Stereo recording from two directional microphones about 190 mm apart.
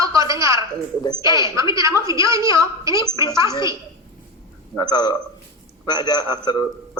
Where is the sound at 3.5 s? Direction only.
20° left (ahead or behind).